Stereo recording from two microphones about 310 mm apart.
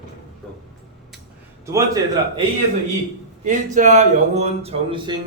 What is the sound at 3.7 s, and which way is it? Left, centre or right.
Speech, right.